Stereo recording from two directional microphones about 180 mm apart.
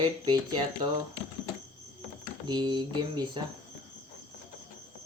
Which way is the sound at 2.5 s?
25° right (ahead or behind).